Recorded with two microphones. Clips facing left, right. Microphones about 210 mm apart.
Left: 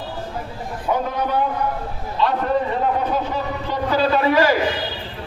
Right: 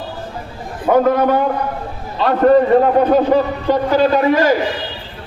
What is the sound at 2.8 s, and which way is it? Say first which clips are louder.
Speech: right 9 dB; 60° right (ahead or behind).